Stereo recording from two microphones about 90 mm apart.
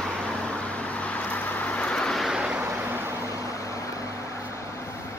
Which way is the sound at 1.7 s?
10° left (ahead or behind).